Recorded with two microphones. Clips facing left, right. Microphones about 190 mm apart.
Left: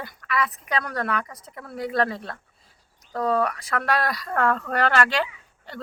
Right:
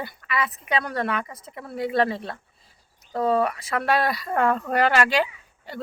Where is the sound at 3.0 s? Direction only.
5° right (ahead or behind).